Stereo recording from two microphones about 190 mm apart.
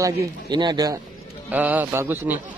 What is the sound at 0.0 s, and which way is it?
Speech, 20° right (ahead or behind).